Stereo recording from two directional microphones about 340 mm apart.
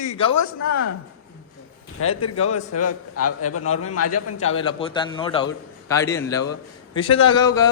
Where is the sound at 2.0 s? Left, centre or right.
Left.